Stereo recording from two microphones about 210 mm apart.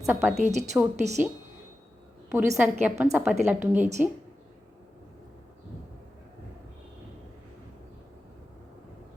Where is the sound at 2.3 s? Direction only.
10° right (ahead or behind).